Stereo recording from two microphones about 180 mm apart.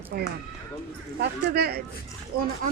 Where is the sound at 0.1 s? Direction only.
60° right (ahead or behind).